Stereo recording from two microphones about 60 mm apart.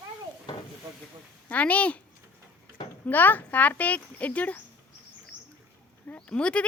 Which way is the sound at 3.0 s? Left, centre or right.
Left.